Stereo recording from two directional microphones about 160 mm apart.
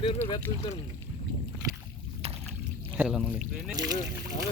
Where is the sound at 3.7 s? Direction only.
25° right (ahead or behind).